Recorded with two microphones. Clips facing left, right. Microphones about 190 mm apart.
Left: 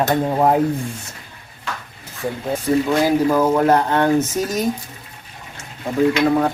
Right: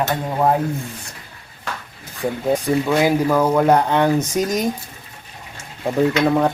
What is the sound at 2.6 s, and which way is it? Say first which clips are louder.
Speech: left 3 dB; 10° right (ahead or behind).